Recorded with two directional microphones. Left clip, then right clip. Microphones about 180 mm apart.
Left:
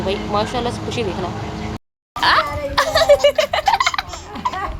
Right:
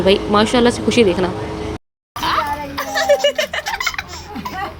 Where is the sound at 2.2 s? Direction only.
45° left (ahead or behind).